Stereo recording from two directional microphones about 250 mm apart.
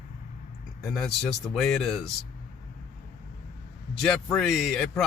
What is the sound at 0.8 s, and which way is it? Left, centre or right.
Speech, centre.